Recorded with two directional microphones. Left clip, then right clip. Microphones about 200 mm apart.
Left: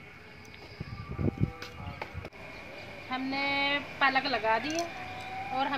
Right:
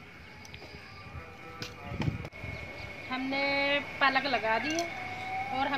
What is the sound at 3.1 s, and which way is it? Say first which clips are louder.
A woman's voice: right 1 dB; 5° right (ahead or behind).